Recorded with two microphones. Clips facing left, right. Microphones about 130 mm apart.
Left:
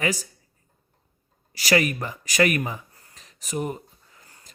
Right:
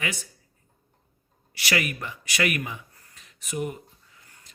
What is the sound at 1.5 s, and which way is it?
Speech, 40° left (ahead or behind).